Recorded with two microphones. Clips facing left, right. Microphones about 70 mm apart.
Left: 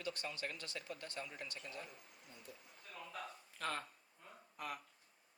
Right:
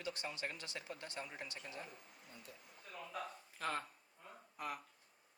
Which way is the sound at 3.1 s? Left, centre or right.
Centre.